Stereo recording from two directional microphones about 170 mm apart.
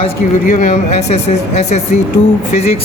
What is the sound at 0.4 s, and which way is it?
Speech, 50° left (ahead or behind).